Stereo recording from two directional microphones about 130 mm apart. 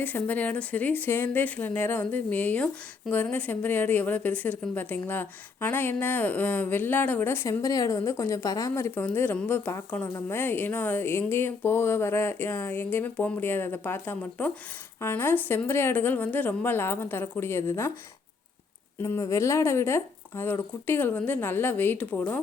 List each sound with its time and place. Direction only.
0.0 s a woman's voice: 15° left (ahead or behind)
19.0 s a woman's voice: 20° left (ahead or behind)